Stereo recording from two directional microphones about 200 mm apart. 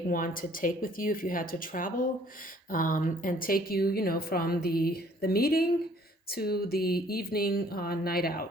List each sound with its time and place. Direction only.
0.1 s a woman's voice: 45° left (ahead or behind)